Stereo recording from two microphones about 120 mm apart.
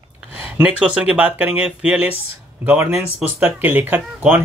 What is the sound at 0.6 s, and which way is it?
Speech, 10° right (ahead or behind).